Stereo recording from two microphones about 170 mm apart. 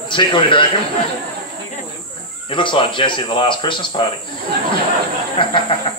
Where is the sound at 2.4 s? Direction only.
30° left (ahead or behind).